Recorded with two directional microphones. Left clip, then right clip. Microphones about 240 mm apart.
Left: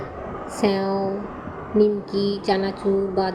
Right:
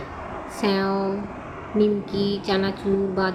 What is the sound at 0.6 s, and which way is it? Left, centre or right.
A woman's voice, centre.